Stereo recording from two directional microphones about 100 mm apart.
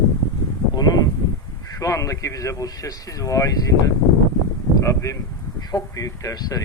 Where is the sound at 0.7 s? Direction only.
40° left (ahead or behind).